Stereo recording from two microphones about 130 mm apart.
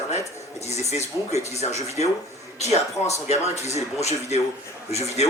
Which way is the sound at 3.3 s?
60° left (ahead or behind).